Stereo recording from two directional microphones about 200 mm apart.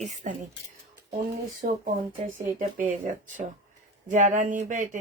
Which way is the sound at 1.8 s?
40° right (ahead or behind).